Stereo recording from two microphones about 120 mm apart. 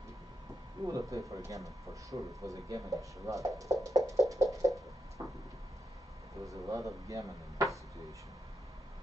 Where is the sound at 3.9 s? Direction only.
25° right (ahead or behind).